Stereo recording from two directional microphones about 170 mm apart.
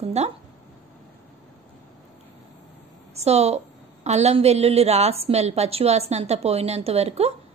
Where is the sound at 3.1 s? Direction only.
40° right (ahead or behind).